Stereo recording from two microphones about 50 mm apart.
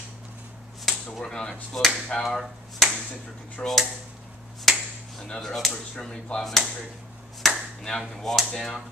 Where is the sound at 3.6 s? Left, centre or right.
Left.